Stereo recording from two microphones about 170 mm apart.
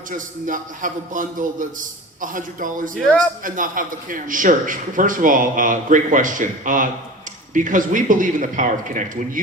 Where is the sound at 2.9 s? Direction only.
5° left (ahead or behind).